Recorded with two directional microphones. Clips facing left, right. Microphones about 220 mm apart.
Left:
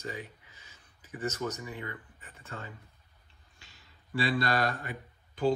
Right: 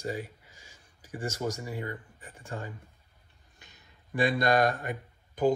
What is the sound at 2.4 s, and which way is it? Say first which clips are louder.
Speech: right 5 dB; 10° right (ahead or behind).